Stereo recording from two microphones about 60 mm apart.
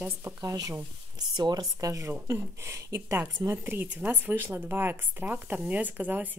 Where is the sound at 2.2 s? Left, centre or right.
Right.